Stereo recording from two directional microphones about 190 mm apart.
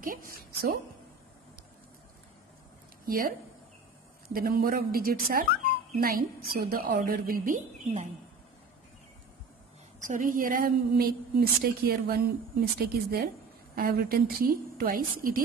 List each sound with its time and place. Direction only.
0.0 s a woman's voice: 50° right (ahead or behind)
3.1 s a woman's voice: 50° right (ahead or behind)
10.0 s a woman's voice: 45° right (ahead or behind)